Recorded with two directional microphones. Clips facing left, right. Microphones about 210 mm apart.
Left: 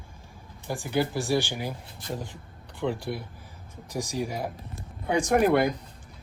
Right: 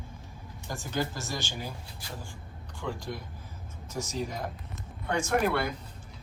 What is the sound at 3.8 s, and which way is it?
Speech, 15° left (ahead or behind).